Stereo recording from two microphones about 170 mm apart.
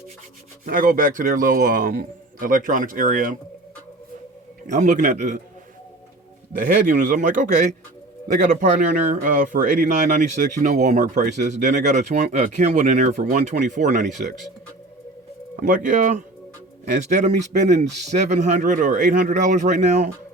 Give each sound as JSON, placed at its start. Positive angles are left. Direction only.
{"t": 0.6, "sound": "speech", "side_deg": -55}
{"t": 4.6, "sound": "speech", "side_deg": -50}
{"t": 6.5, "sound": "speech", "side_deg": -55}
{"t": 15.6, "sound": "speech", "side_deg": -50}